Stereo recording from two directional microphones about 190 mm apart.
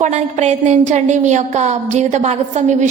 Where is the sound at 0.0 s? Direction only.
35° right (ahead or behind).